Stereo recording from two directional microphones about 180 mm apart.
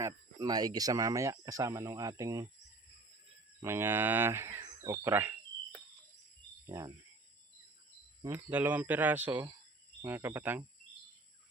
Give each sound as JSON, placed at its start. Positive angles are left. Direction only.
{"t": 0.0, "sound": "speech", "side_deg": -20}
{"t": 3.6, "sound": "speech", "side_deg": -15}
{"t": 8.3, "sound": "speech", "side_deg": -10}